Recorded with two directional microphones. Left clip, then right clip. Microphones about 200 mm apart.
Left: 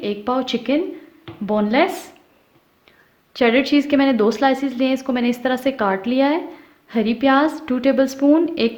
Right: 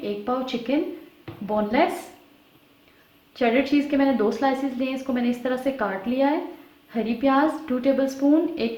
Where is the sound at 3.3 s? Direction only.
50° left (ahead or behind).